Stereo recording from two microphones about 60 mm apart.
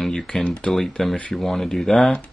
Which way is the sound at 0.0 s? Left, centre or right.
Centre.